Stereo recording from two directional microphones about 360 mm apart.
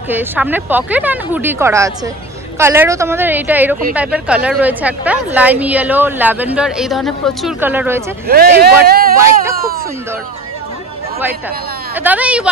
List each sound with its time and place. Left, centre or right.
0.1 s a woman's voice: centre
8.3 s speech: right
9.2 s speech: centre
11.9 s a woman's voice: centre